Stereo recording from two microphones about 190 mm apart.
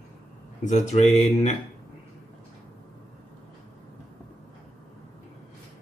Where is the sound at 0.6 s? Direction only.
35° left (ahead or behind).